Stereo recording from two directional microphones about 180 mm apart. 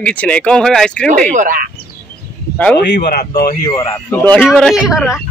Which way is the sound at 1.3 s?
50° right (ahead or behind).